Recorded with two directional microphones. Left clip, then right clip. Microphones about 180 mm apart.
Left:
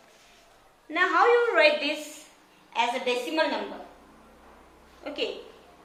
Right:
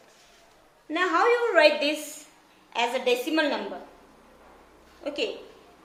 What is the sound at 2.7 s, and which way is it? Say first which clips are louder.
Speech: right 1 dB; 60° right (ahead or behind).